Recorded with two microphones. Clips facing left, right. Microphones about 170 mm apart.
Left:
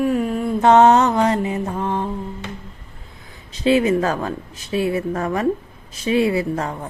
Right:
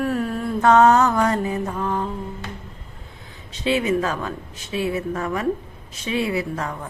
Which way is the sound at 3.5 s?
40° left (ahead or behind).